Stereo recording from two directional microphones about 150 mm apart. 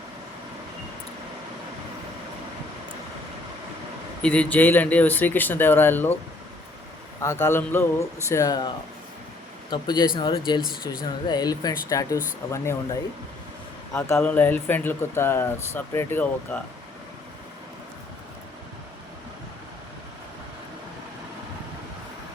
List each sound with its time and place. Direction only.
4.2 s speech: 10° left (ahead or behind)
7.2 s speech: 20° left (ahead or behind)
9.6 s speech: 30° left (ahead or behind); by 16.6 s 10° left (ahead or behind)